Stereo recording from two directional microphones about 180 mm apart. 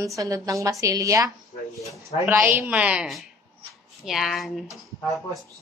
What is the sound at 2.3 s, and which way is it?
A woman's voice, 10° right (ahead or behind).